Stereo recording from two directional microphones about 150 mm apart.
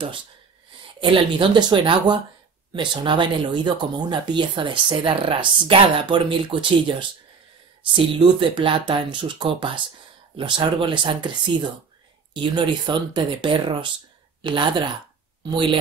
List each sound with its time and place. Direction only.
1.0 s speech: 35° right (ahead or behind)